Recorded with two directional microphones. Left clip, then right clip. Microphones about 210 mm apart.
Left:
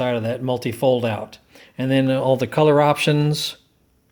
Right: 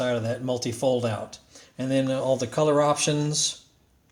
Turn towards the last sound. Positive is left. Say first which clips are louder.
# left 5 dB
turn(degrees=35)  # may be behind; listen again after turning